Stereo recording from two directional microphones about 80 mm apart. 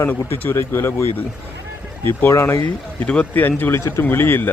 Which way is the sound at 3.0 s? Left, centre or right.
Centre.